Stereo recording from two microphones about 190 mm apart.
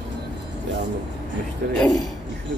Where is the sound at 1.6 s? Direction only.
50° right (ahead or behind).